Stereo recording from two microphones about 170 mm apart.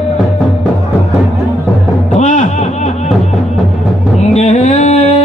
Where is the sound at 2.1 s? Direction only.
45° left (ahead or behind).